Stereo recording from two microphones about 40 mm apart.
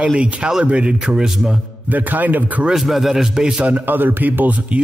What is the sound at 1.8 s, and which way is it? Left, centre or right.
Speech, right.